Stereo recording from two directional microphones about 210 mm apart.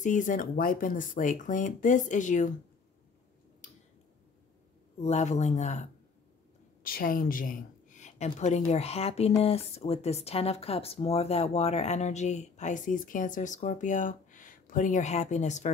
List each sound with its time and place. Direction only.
0.0 s speech: 35° left (ahead or behind)
5.0 s speech: 30° left (ahead or behind)